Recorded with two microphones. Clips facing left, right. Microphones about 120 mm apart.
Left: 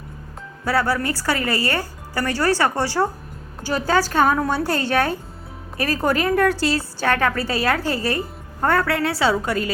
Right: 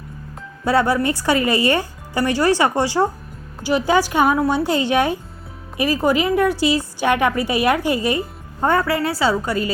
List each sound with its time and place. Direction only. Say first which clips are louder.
0.6 s a woman's voice: right 4 dB; 20° right (ahead or behind)
8.8 s a woman's voice: right 1 dB; centre (ahead or behind)